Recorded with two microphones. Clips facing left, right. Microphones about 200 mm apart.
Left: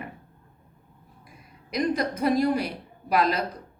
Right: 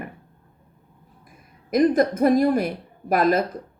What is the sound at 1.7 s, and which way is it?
Speech, 50° right (ahead or behind).